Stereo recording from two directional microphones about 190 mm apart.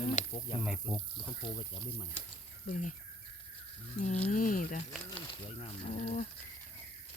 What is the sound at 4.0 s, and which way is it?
Speech, 35° left (ahead or behind).